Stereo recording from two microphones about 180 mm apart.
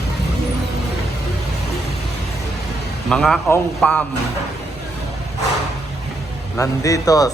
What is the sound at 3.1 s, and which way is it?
Speech, 5° left (ahead or behind).